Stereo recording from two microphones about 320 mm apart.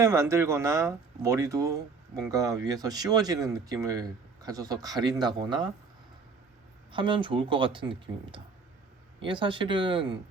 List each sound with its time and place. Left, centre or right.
0.0 s speech: centre
6.9 s speech: centre